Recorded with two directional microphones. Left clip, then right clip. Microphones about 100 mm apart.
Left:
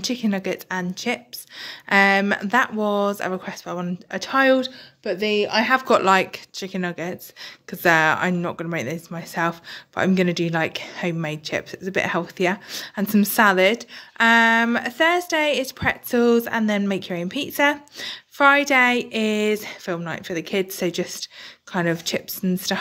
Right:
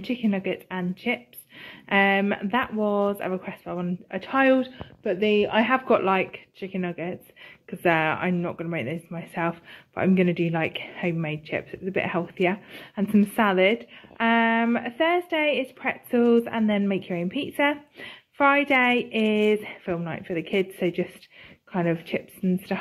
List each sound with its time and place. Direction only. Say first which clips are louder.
0.0 s speech: left 3 dB; 35° left (ahead or behind)
4.4 s speech: left 3 dB; 15° left (ahead or behind)
5.0 s a woman's voice: left 1 dB; centre (ahead or behind)
5.9 s a woman's voice: left 5 dB; 45° left (ahead or behind); by 20.9 s 20° left (ahead or behind)
22.0 s speech: left 4 dB; 35° left (ahead or behind)